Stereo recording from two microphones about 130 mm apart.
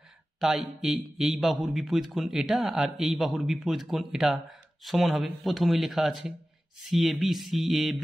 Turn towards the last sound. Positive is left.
turn(degrees=0)  # may be behind; listen again after turning